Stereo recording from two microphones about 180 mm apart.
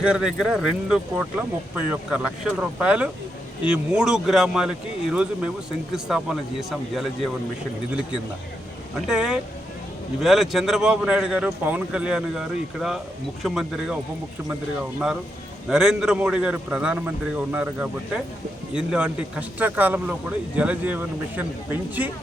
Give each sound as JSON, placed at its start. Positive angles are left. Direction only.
{"t": 0.0, "sound": "a man's voice", "side_deg": -5}
{"t": 9.0, "sound": "a man's voice", "side_deg": -5}